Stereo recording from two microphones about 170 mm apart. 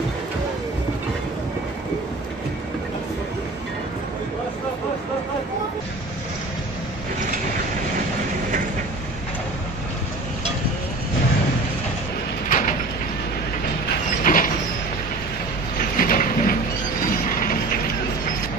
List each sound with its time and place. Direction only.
12.4 s bird: 50° left (ahead or behind)
14.2 s vehicle: 55° left (ahead or behind)
16.0 s a sound: 55° left (ahead or behind)